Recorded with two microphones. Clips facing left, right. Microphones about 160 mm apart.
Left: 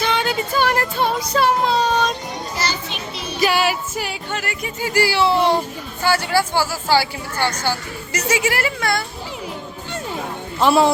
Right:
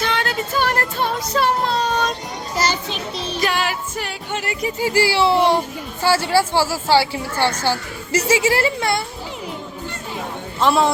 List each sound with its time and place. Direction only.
0.0 s music: centre (ahead or behind)
2.6 s children playing: 40° right (ahead or behind)
3.2 s music: 10° left (ahead or behind)
4.3 s speech: 25° right (ahead or behind)
10.6 s a man's voice: 5° left (ahead or behind)